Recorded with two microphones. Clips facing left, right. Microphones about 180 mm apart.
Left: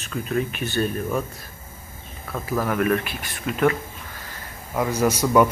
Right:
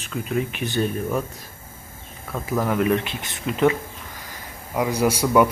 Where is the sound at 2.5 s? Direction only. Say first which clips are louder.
Right 1 dB; 20° right (ahead or behind).